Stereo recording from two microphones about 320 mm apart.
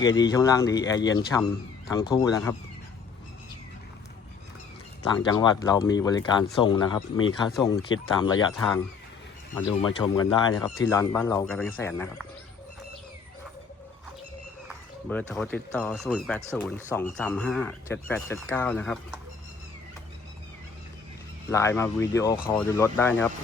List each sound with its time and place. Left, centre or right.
0.2 s speech: centre
0.9 s speech: left
1.9 s speech: centre
5.1 s speech: centre
15.2 s speech: centre
21.5 s speech: centre